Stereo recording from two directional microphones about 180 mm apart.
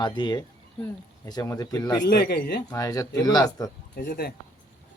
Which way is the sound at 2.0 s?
65° left (ahead or behind).